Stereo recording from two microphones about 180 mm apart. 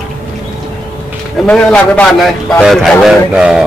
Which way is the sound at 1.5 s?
5° left (ahead or behind).